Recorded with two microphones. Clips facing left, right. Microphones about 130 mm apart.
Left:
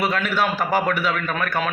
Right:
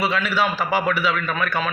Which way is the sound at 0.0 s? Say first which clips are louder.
Even; 50° left (ahead or behind).